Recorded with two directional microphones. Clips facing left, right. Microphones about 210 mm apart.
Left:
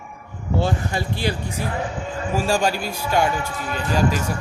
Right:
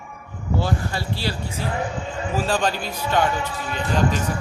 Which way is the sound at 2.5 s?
10° left (ahead or behind).